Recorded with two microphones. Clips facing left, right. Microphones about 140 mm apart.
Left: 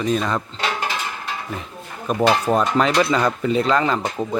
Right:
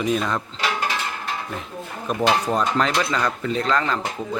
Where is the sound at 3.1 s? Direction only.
20° left (ahead or behind).